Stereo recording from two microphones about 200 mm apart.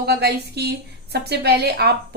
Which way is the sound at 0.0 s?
55° right (ahead or behind).